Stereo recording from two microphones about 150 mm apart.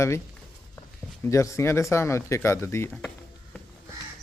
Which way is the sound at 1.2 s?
20° left (ahead or behind).